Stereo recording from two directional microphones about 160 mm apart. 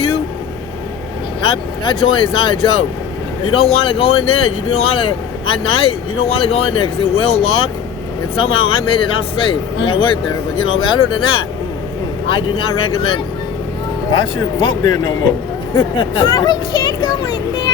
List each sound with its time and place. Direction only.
1.9 s speech: 35° left (ahead or behind)